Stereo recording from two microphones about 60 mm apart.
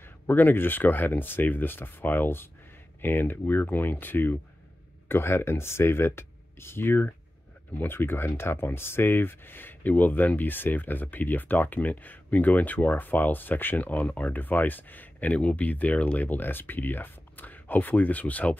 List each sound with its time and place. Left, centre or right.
0.3 s speech: left